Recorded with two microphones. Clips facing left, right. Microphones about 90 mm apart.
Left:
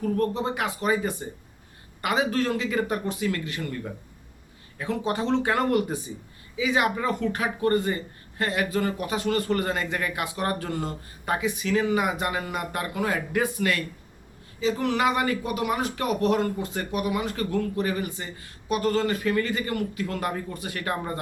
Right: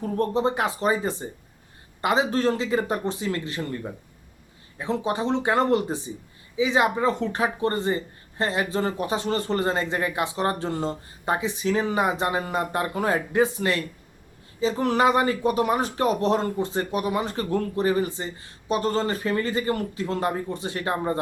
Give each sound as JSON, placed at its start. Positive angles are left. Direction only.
{"t": 0.0, "sound": "speech", "side_deg": -30}
{"t": 4.8, "sound": "speech", "side_deg": -20}